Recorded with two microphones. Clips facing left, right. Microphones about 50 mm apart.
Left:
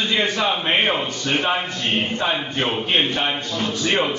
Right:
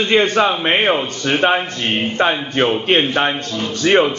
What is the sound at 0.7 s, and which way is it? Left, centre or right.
Speech, right.